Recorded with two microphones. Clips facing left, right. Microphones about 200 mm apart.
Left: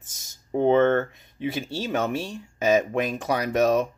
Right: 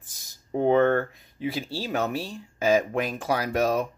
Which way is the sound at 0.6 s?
25° left (ahead or behind).